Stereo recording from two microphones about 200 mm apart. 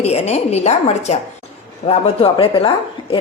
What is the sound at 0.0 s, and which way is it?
A woman's voice, 30° left (ahead or behind).